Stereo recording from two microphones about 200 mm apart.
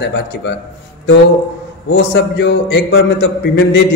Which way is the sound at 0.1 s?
60° left (ahead or behind).